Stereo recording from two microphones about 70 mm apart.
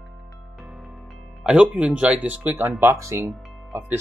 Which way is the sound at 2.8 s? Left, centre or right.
Right.